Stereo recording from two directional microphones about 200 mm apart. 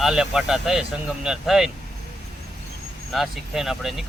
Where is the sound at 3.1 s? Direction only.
Centre (ahead or behind).